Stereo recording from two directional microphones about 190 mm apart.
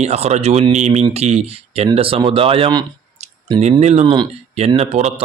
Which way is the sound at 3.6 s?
35° right (ahead or behind).